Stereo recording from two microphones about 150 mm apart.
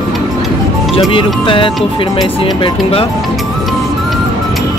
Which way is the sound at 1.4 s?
35° left (ahead or behind).